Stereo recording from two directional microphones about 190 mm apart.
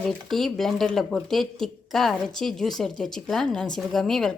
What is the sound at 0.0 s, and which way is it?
Speech, centre (ahead or behind).